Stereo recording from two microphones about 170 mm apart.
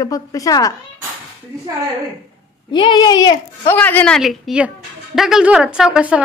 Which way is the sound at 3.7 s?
10° left (ahead or behind).